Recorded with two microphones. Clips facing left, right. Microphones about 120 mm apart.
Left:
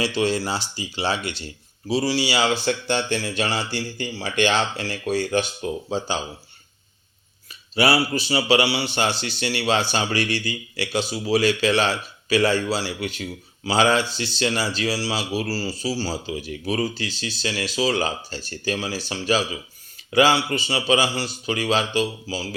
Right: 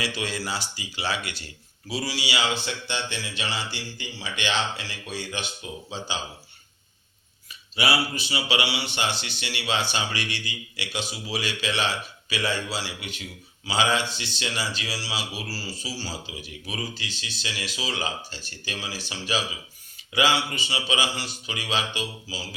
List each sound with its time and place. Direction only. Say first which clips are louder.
0.0 s speech: left 8 dB; 30° left (ahead or behind)
7.8 s speech: left 6 dB; 35° left (ahead or behind)